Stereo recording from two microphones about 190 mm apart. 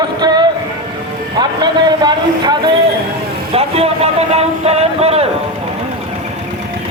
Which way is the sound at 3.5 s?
30° right (ahead or behind).